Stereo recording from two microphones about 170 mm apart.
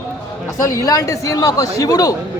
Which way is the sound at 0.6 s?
20° left (ahead or behind).